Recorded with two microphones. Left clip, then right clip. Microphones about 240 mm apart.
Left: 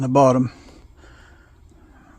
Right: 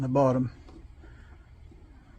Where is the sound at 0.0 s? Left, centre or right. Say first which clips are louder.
Left 9 dB; left.